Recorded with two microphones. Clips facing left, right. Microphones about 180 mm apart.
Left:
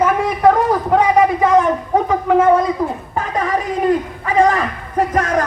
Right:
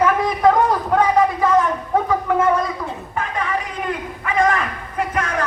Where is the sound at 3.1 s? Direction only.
40° left (ahead or behind).